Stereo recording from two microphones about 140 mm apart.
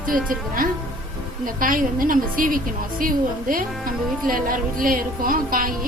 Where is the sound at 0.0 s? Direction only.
85° right.